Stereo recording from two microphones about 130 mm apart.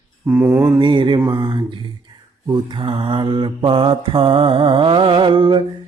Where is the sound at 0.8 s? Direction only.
40° right (ahead or behind).